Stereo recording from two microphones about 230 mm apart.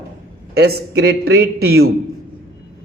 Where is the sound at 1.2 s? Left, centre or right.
Right.